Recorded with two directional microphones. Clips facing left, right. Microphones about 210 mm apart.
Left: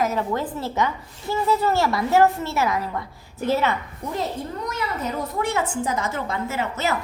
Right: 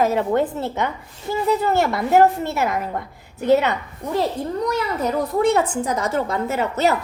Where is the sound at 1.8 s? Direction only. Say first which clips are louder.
Right 3 dB; 55° right (ahead or behind).